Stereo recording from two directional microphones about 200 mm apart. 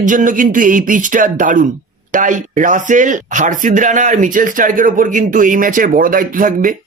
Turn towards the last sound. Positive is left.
turn(degrees=-45)  # may be behind; listen again after turning